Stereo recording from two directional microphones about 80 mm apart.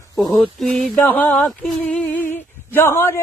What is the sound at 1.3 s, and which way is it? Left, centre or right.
Female singing, centre.